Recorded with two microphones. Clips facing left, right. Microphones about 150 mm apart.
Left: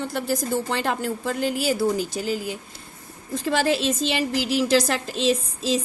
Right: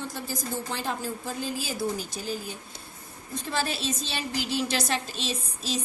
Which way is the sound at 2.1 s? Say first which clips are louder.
Left 7 dB; 90° left.